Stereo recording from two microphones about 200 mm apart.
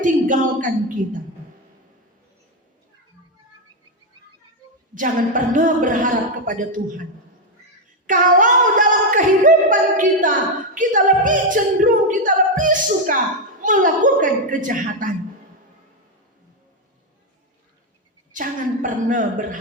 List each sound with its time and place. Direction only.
0.0 s speech: 40° right (ahead or behind)
4.9 s speech: 40° right (ahead or behind)
18.3 s speech: 40° right (ahead or behind)